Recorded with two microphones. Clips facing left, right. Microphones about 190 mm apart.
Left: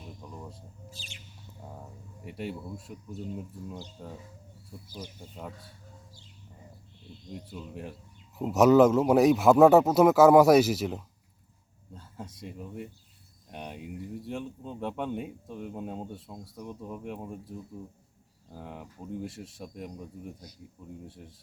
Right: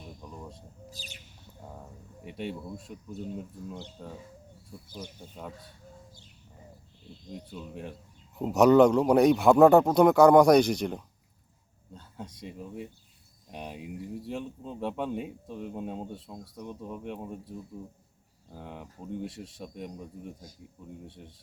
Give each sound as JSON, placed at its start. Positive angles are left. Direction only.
{"t": 0.2, "sound": "a sound", "side_deg": 5}
{"t": 0.9, "sound": "bird", "side_deg": -40}
{"t": 2.2, "sound": "speech", "side_deg": 0}
{"t": 4.0, "sound": "speech", "side_deg": 5}
{"t": 5.3, "sound": "speech", "side_deg": 0}
{"t": 7.3, "sound": "speech", "side_deg": 0}